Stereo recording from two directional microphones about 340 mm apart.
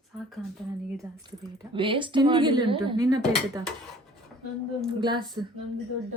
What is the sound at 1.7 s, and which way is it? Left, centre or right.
A woman's voice, centre.